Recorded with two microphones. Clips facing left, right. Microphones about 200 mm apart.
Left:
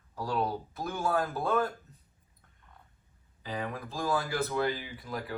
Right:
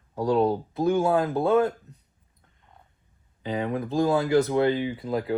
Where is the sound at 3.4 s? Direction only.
25° right (ahead or behind).